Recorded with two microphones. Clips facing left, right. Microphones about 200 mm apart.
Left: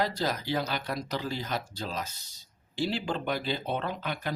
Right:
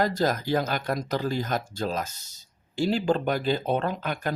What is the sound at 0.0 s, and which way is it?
Speech, 45° right (ahead or behind).